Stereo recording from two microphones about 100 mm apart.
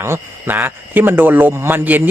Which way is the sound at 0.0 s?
25° right (ahead or behind).